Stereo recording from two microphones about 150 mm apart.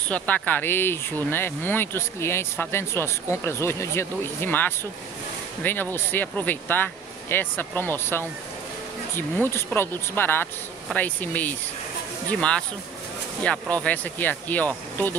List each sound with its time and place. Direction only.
0.1 s speech: 10° left (ahead or behind)